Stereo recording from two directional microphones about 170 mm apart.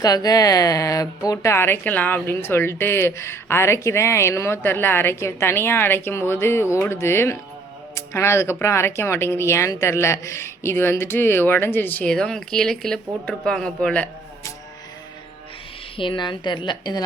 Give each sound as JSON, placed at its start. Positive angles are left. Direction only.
{"t": 0.0, "sound": "a woman's voice", "side_deg": 20}
{"t": 16.0, "sound": "a woman's voice", "side_deg": 30}